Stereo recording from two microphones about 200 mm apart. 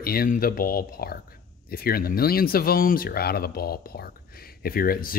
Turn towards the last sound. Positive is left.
turn(degrees=45)  # may be behind; listen again after turning